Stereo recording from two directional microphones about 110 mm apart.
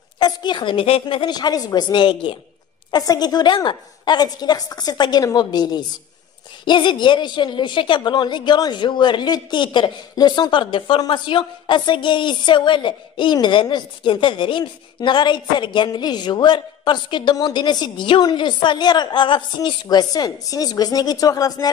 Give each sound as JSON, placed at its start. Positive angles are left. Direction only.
{"t": 0.2, "sound": "a woman's voice", "side_deg": 45}
{"t": 2.9, "sound": "a woman's voice", "side_deg": 35}